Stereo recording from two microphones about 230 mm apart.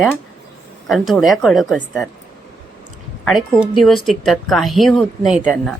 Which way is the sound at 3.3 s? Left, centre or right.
Centre.